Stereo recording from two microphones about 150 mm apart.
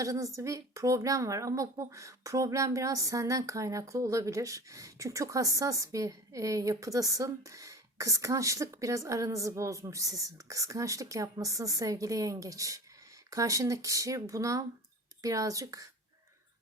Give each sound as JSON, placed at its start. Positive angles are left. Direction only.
{"t": 0.0, "sound": "speech", "side_deg": -20}